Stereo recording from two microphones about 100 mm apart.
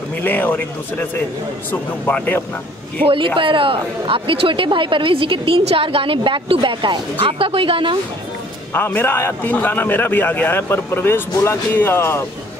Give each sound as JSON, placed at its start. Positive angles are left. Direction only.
{"t": 0.2, "sound": "a man's voice", "side_deg": 20}
{"t": 3.3, "sound": "speech", "side_deg": -60}
{"t": 7.2, "sound": "speech", "side_deg": -65}
{"t": 8.7, "sound": "a man's voice", "side_deg": 20}